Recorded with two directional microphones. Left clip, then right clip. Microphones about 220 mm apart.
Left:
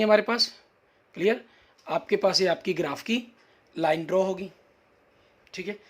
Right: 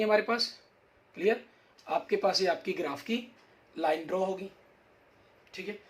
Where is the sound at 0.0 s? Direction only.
45° left (ahead or behind).